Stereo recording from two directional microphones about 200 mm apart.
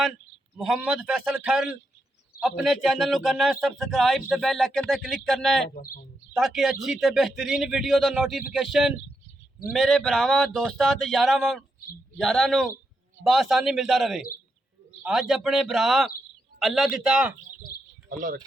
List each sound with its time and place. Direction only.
0.5 s a man's voice: centre (ahead or behind)
5.7 s speech: 45° left (ahead or behind)
6.3 s a man's voice: centre (ahead or behind)